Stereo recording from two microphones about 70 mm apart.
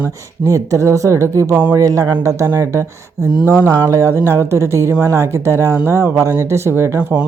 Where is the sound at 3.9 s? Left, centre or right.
Right.